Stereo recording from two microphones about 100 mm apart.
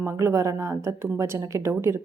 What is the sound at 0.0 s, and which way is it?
A woman's voice, 30° right (ahead or behind).